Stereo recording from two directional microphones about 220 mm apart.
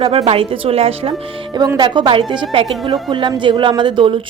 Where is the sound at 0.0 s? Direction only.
25° right (ahead or behind).